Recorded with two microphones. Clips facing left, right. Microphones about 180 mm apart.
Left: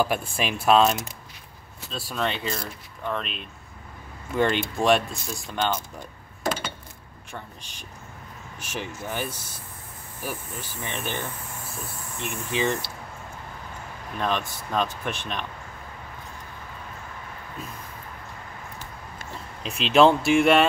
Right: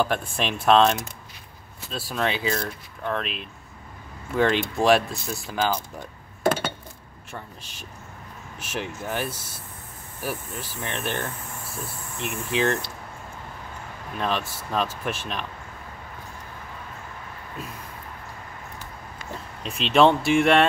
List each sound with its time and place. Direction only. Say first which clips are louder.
0.0 s speech: even; 5° left (ahead or behind)
6.4 s a sound: right 5 dB; 60° right (ahead or behind)
7.3 s speech: right 1 dB; 5° right (ahead or behind)
14.7 s speech: even; 5° right (ahead or behind)
19.6 s speech: left 1 dB; centre (ahead or behind)